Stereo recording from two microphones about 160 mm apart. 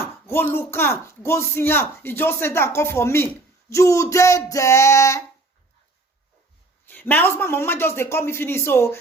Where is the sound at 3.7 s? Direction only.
20° left (ahead or behind).